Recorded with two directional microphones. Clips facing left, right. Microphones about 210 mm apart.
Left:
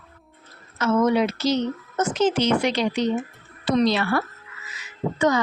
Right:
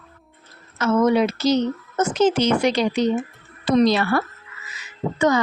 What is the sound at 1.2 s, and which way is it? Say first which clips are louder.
A woman's voice: right 3 dB; 40° right (ahead or behind).